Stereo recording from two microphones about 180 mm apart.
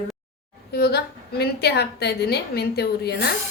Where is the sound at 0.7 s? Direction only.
60° left (ahead or behind).